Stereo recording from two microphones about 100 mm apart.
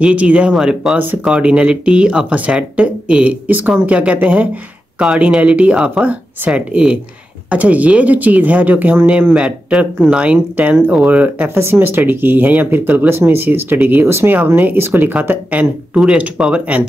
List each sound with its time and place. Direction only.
0.0 s speech: 15° right (ahead or behind)